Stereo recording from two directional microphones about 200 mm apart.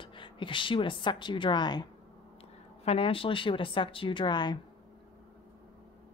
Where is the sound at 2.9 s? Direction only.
25° left (ahead or behind).